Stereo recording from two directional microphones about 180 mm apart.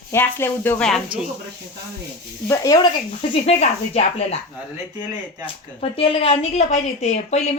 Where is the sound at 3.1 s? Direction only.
35° left (ahead or behind).